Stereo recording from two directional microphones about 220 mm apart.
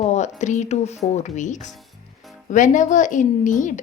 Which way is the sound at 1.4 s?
35° left (ahead or behind).